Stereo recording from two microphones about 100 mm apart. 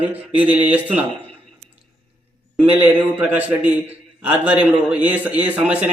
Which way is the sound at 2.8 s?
15° right (ahead or behind).